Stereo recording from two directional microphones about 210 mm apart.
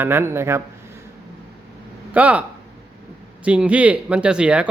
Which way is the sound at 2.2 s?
5° right (ahead or behind).